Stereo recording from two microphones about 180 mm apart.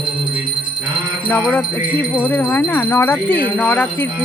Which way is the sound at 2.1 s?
10° left (ahead or behind).